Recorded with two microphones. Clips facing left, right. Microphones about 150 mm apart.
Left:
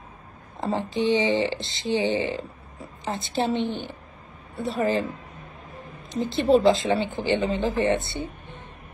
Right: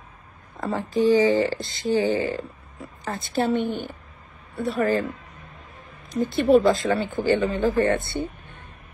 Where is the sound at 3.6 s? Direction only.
50° right (ahead or behind).